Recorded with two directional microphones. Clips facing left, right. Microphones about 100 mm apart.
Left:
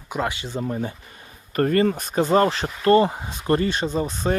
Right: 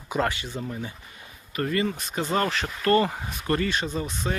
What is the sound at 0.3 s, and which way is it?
Speech, 25° left (ahead or behind).